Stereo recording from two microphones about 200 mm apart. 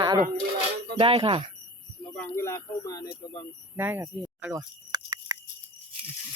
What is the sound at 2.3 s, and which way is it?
Speech, 15° left (ahead or behind).